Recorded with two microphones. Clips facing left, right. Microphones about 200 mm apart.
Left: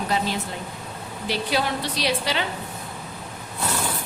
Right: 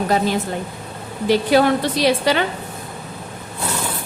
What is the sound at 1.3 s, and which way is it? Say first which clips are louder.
A woman's voice: right 10 dB; 50° right (ahead or behind).